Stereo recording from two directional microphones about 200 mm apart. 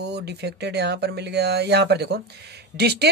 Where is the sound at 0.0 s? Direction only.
55° right (ahead or behind).